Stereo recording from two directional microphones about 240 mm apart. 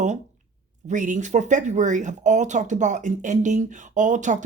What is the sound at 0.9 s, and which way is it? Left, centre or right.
Speech, right.